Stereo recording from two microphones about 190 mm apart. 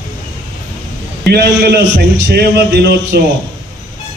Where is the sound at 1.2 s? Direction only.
55° right (ahead or behind).